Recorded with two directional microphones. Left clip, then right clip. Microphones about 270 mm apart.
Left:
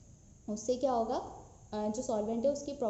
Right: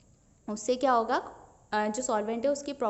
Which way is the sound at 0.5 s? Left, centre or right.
Right.